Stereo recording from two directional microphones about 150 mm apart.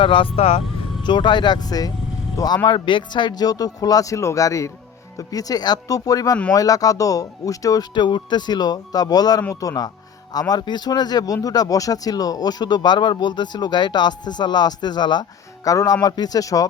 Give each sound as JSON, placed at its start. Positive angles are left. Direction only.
{"t": 0.0, "sound": "speech", "side_deg": 35}
{"t": 1.0, "sound": "speech", "side_deg": 30}